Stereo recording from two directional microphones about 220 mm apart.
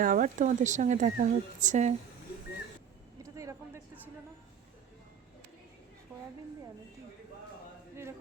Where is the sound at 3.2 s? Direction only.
15° right (ahead or behind).